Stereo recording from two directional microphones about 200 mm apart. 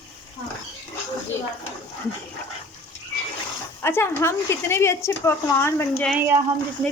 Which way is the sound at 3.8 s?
10° left (ahead or behind).